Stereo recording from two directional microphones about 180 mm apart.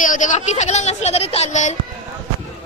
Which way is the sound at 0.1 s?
40° left (ahead or behind).